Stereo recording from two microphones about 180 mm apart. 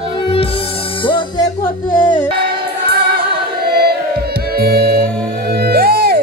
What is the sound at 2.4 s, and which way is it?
Music, 60° right (ahead or behind).